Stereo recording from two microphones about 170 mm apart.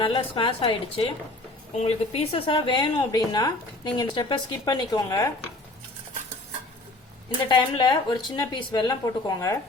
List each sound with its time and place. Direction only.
0.0 s a woman's voice: 30° left (ahead or behind)
7.4 s a woman's voice: 25° left (ahead or behind)